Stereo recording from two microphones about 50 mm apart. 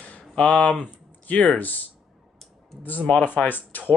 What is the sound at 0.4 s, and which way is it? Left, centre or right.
Speech, left.